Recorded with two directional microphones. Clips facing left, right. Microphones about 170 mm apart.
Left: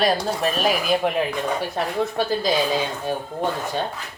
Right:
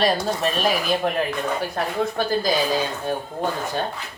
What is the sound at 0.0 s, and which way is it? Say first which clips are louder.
Speech: even; centre (ahead or behind).